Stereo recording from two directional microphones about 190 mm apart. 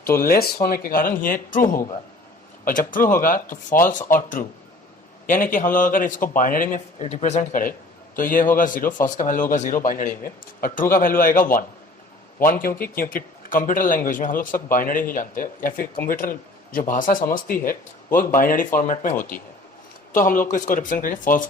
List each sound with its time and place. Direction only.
0.2 s a man's voice: 50° left (ahead or behind)
5.2 s a man's voice: 45° left (ahead or behind)